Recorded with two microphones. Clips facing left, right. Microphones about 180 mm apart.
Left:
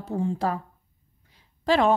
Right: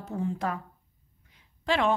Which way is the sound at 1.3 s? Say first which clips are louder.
Left 6 dB; 35° left (ahead or behind).